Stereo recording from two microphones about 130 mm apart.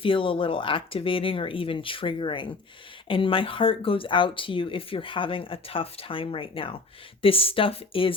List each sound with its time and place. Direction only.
0.0 s speech: 45° left (ahead or behind)